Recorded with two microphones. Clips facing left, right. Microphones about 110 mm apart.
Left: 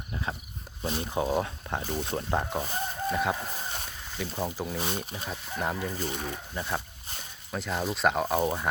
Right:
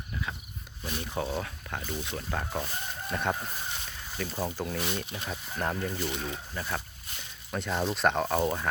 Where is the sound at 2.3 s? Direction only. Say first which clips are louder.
Left 4 dB; 20° left (ahead or behind).